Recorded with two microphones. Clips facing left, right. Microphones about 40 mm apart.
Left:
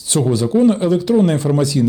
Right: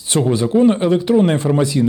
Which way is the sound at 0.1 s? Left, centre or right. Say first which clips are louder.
Even; right.